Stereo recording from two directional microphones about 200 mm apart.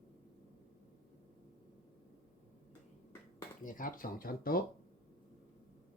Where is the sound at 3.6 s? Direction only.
40° left (ahead or behind).